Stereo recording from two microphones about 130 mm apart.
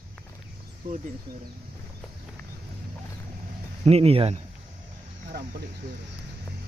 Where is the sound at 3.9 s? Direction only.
50° right (ahead or behind).